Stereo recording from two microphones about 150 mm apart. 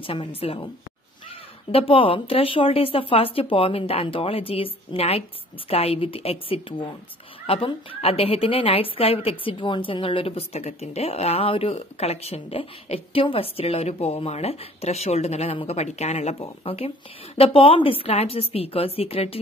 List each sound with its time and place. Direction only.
0.0 s a woman's voice: 40° left (ahead or behind)
1.7 s a woman's voice: 40° left (ahead or behind)